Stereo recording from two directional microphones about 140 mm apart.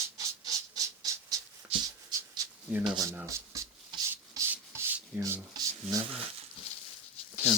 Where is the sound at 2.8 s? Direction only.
35° right (ahead or behind).